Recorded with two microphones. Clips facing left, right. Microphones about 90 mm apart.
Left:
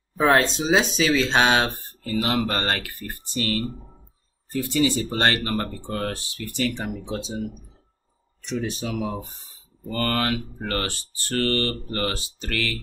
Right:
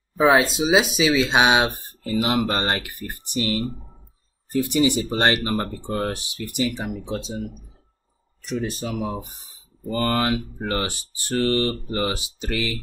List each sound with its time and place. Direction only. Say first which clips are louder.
0.2 s speech: right 2 dB; 5° right (ahead or behind)
6.6 s speech: right 1 dB; 5° right (ahead or behind)
9.8 s speech: right 2 dB; 20° right (ahead or behind)